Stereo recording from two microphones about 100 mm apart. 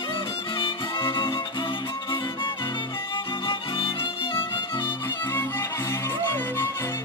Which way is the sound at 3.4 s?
55° left (ahead or behind).